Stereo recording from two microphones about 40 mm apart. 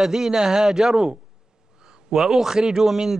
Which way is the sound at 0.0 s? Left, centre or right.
Centre.